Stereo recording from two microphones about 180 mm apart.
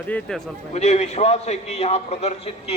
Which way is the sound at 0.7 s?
40° left (ahead or behind).